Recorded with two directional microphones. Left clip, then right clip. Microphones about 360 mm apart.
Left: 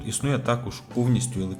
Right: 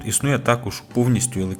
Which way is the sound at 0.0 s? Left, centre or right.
Centre.